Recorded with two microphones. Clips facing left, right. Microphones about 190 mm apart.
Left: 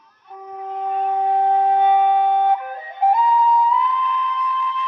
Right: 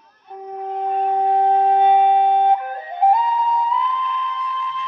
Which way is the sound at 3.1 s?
25° right (ahead or behind).